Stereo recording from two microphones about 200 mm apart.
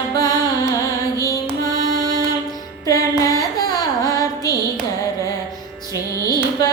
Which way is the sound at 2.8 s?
15° left (ahead or behind).